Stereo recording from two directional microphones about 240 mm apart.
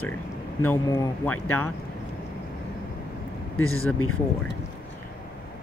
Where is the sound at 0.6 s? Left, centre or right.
Centre.